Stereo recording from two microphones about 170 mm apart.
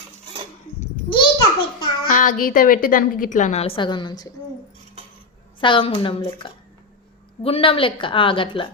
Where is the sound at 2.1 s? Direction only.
50° left (ahead or behind); by 4.3 s 25° left (ahead or behind).